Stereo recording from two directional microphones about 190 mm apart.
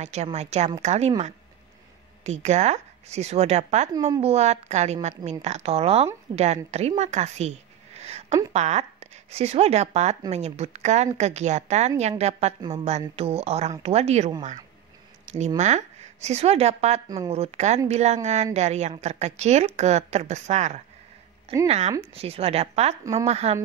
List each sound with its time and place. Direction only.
0.0 s a woman's voice: 35° right (ahead or behind)